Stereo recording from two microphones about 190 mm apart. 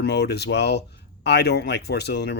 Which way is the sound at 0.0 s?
60° left (ahead or behind).